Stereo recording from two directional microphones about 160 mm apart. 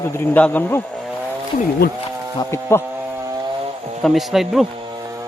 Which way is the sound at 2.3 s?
15° left (ahead or behind).